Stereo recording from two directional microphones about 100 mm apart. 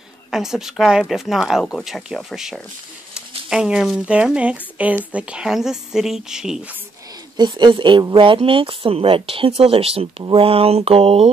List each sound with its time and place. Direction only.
0.3 s a woman's voice: 5° right (ahead or behind)
7.3 s a woman's voice: 50° right (ahead or behind); by 10.2 s 80° right
10.3 s mantra: 75° right (ahead or behind)